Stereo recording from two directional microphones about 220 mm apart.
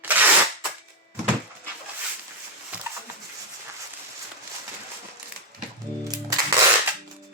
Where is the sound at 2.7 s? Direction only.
5° right (ahead or behind).